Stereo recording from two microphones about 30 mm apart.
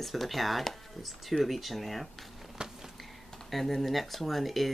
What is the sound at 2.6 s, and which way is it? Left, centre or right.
Insect, right.